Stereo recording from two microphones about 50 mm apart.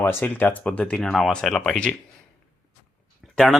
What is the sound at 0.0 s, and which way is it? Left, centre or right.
Speech, left.